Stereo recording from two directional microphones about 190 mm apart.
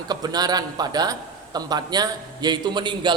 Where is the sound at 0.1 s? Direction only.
20° right (ahead or behind).